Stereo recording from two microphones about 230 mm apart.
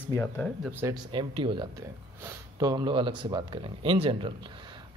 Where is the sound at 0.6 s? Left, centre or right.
Centre.